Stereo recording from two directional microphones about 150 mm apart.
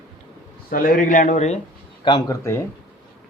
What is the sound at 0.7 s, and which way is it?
Speech, 70° left (ahead or behind).